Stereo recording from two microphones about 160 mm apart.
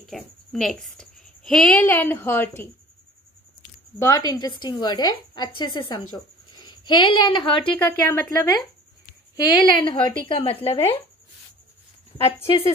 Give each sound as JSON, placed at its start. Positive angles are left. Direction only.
{"t": 0.1, "sound": "a woman's voice", "side_deg": 0}
{"t": 4.0, "sound": "a woman's voice", "side_deg": 20}
{"t": 7.8, "sound": "a woman's voice", "side_deg": 15}
{"t": 9.6, "sound": "a woman's voice", "side_deg": 30}
{"t": 12.4, "sound": "a woman's voice", "side_deg": 35}